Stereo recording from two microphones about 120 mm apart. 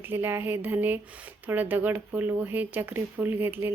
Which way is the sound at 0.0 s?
20° right (ahead or behind).